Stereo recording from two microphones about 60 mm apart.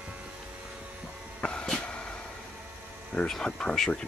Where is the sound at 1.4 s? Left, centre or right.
Centre.